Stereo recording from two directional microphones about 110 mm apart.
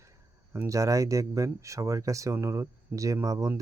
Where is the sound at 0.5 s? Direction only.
25° right (ahead or behind).